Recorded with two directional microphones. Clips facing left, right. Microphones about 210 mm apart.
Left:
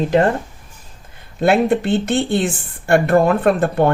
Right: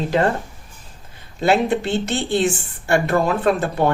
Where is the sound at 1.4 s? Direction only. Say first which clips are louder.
Left 3 dB; 55° left (ahead or behind).